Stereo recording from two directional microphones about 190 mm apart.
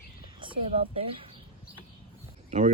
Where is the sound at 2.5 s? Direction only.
40° right (ahead or behind).